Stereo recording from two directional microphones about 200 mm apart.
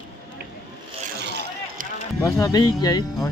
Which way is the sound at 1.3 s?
55° right (ahead or behind).